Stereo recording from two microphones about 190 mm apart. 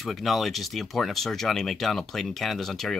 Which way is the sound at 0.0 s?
Centre (ahead or behind).